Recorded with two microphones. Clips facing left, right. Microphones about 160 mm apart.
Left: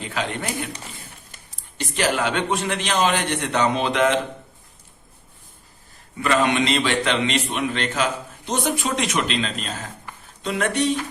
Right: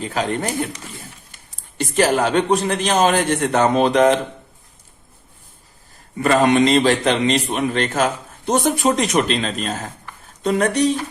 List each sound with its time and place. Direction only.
0.0 s a man's voice: 40° right (ahead or behind)
1.8 s a man's voice: 45° right (ahead or behind)
6.1 s a man's voice: 40° right (ahead or behind)